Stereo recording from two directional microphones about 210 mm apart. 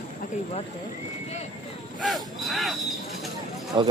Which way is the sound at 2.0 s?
Centre (ahead or behind).